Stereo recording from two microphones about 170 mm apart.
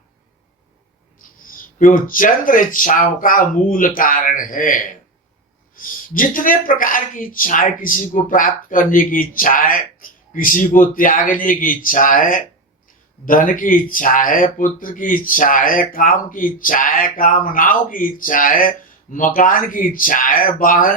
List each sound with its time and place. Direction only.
1.5 s a woman's voice: 55° left (ahead or behind)